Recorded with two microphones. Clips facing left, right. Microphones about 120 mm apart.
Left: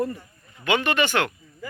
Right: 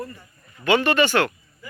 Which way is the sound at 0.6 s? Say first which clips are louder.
Right 4 dB; 15° left (ahead or behind).